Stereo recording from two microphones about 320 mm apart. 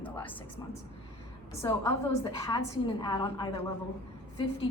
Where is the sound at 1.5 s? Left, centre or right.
Centre.